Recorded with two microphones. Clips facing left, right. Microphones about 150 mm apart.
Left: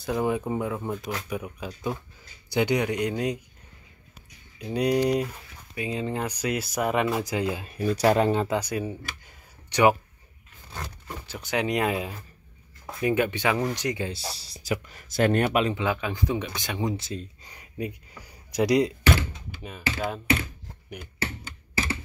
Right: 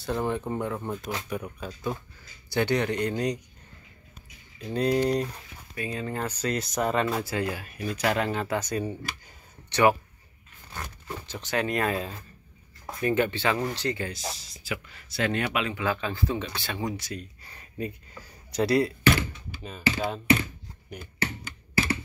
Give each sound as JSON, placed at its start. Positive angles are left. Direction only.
{"t": 0.0, "sound": "speech", "side_deg": 10}
{"t": 4.7, "sound": "speech", "side_deg": 10}
{"t": 7.7, "sound": "speech", "side_deg": 35}
{"t": 8.5, "sound": "speech", "side_deg": 10}
{"t": 9.7, "sound": "speech", "side_deg": 15}
{"t": 11.2, "sound": "speech", "side_deg": 10}
{"t": 14.1, "sound": "speech", "side_deg": 35}
{"t": 15.7, "sound": "speech", "side_deg": 15}